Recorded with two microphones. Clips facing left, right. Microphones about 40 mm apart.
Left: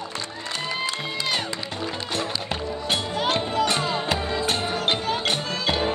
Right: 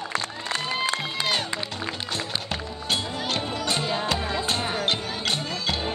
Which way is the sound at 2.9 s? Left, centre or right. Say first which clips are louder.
Left 3 dB; left.